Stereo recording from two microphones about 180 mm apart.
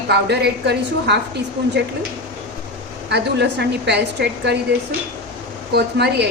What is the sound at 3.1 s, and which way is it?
A woman's voice, 70° right (ahead or behind).